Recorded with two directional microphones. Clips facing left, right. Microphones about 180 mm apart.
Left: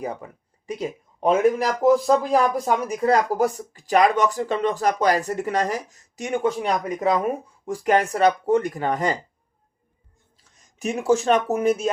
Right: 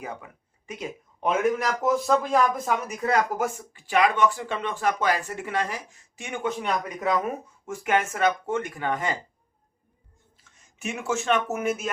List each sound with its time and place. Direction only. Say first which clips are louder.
0.0 s a sound: left 6 dB; 35° left (ahead or behind)
0.7 s a man's voice: left 6 dB; 35° left (ahead or behind)
10.8 s a man's voice: left 8 dB; 35° left (ahead or behind)